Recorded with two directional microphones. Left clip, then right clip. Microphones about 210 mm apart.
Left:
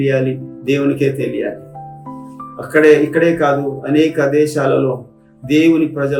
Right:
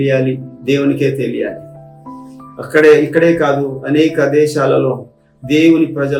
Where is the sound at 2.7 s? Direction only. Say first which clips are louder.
Right 2 dB; centre (ahead or behind).